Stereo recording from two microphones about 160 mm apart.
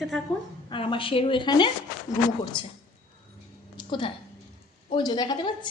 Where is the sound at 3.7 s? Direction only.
30° left (ahead or behind).